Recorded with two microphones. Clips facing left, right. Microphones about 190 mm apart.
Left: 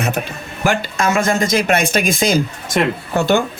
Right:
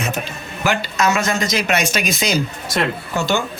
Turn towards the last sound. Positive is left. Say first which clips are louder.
# left 5 dB
turn(degrees=55)  # may be behind; listen again after turning